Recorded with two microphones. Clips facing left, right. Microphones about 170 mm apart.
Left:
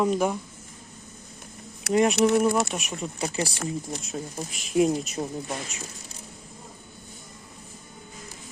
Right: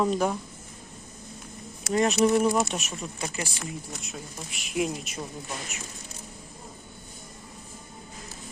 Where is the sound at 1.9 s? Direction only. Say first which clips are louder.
Left 3 dB; 15° left (ahead or behind).